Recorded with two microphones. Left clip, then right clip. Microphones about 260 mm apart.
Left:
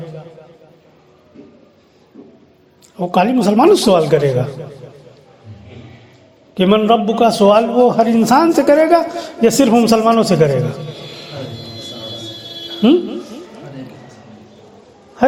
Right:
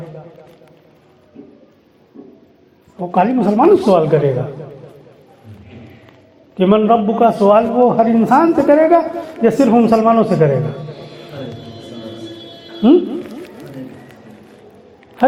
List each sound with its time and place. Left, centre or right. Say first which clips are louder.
3.0 s a man's voice: left 1 dB; left
6.5 s a man's voice: even; left